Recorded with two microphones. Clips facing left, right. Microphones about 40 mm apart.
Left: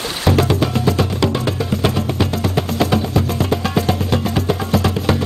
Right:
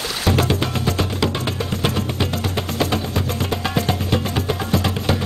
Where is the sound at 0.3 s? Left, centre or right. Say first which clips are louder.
Left 4 dB; centre.